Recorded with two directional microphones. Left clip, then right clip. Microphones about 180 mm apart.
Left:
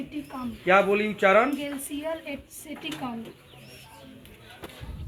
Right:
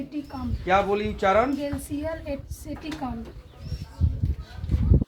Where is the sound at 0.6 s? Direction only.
40° left (ahead or behind).